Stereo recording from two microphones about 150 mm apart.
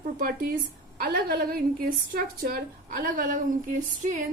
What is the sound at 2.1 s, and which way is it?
A woman's voice, 75° right (ahead or behind).